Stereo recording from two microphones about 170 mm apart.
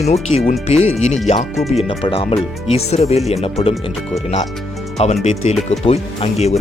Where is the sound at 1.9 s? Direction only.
35° left (ahead or behind).